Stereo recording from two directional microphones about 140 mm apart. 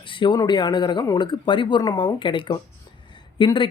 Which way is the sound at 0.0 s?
35° left (ahead or behind).